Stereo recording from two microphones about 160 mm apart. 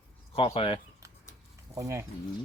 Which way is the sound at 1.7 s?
20° right (ahead or behind).